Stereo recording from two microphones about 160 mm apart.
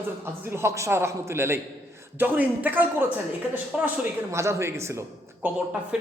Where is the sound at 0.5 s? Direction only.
15° right (ahead or behind).